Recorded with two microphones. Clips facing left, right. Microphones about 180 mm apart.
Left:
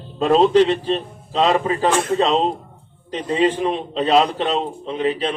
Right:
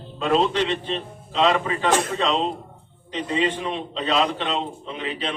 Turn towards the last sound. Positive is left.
turn(degrees=35)  # may be behind; listen again after turning